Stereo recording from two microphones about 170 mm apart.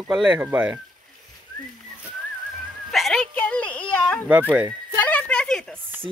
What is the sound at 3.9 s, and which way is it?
Baby cry, 5° left (ahead or behind).